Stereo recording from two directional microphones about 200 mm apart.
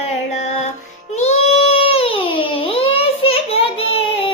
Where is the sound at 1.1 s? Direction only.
35° left (ahead or behind).